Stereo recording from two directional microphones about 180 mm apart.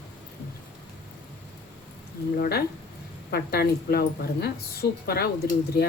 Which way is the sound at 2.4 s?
60° left (ahead or behind).